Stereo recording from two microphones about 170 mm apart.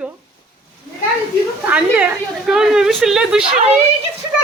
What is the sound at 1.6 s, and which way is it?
A woman's voice, 10° right (ahead or behind).